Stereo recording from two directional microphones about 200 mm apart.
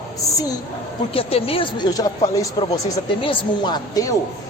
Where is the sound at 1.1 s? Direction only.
30° left (ahead or behind).